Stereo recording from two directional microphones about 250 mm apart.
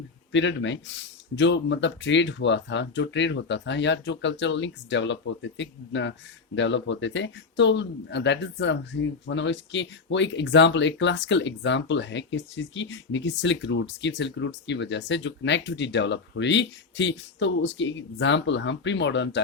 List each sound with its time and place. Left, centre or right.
0.3 s speech: left